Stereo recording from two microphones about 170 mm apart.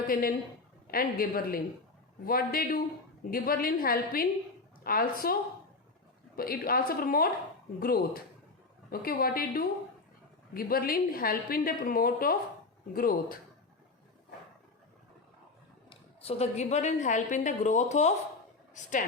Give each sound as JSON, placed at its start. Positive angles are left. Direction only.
{"t": 0.1, "sound": "a woman's voice", "side_deg": 60}
{"t": 15.9, "sound": "a woman's voice", "side_deg": 35}